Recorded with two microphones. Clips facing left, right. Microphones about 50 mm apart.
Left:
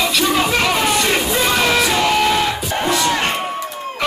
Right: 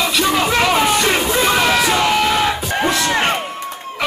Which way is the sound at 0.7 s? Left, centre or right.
Centre.